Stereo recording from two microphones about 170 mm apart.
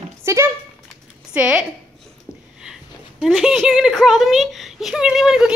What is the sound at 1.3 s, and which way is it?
Speech, 5° right (ahead or behind).